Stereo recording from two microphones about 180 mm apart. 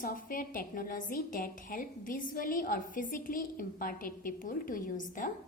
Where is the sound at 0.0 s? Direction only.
50° left (ahead or behind).